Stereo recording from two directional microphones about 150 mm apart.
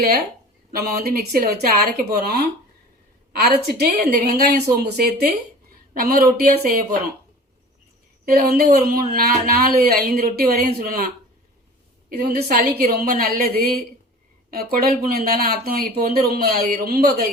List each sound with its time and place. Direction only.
0.7 s a woman's voice: 80° right
8.2 s a woman's voice: 85° right